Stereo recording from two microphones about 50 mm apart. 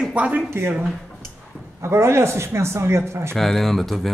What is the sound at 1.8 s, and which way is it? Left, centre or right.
Speech, right.